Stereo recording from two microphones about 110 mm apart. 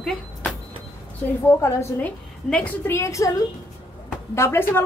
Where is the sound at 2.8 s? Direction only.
25° left (ahead or behind).